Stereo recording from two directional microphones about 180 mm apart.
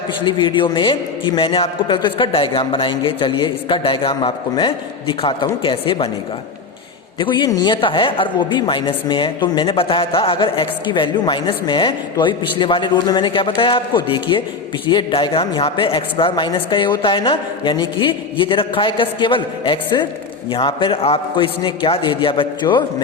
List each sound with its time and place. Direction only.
0.3 s speech: 25° left (ahead or behind)
7.2 s speech: 25° left (ahead or behind)